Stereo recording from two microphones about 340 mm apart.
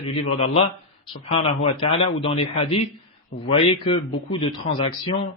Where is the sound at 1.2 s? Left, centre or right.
Centre.